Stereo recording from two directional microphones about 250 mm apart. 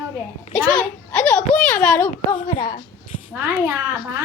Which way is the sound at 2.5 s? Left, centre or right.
Left.